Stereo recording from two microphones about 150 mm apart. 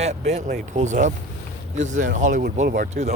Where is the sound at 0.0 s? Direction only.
45° right (ahead or behind); by 2.9 s 70° right (ahead or behind).